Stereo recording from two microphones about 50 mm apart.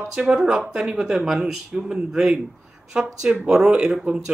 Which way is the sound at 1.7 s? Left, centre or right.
Centre.